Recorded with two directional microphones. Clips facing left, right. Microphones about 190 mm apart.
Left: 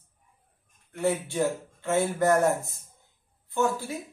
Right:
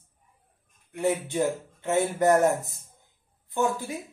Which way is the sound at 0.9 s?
15° right (ahead or behind).